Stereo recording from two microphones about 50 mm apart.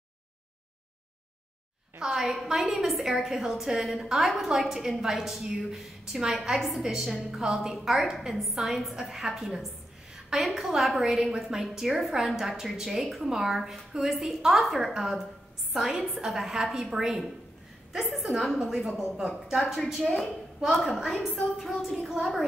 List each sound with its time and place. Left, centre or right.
2.0 s a woman's voice: centre
20.7 s a woman's voice: centre